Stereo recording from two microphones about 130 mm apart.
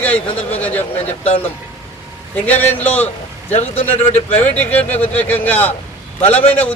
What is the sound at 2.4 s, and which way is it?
Speech, 10° left (ahead or behind).